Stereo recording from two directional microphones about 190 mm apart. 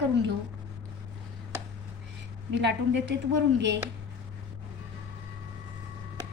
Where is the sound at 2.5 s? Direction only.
70° right (ahead or behind).